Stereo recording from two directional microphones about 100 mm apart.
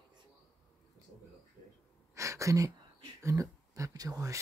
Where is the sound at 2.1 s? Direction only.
30° right (ahead or behind).